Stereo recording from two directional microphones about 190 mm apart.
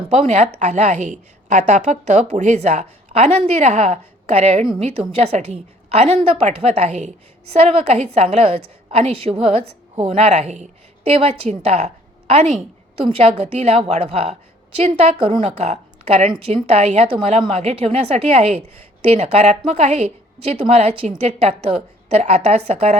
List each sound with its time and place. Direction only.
0.1 s a woman's voice: 35° right (ahead or behind)
13.0 s a woman's voice: 30° right (ahead or behind)